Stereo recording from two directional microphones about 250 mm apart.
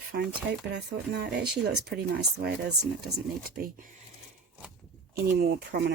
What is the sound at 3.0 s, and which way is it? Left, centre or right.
Speech, right.